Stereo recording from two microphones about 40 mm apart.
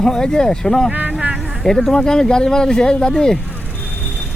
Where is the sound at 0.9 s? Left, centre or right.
Right.